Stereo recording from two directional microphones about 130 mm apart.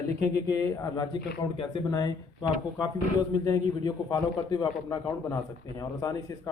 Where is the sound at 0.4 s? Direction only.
30° left (ahead or behind).